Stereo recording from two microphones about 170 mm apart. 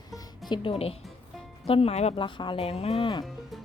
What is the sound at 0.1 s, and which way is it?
Music, 25° left (ahead or behind).